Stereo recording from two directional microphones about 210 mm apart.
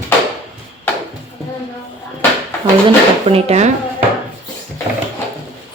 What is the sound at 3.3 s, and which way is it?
Speech, 30° right (ahead or behind).